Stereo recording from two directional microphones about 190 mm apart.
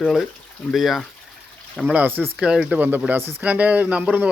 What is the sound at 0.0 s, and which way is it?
Speech, centre (ahead or behind).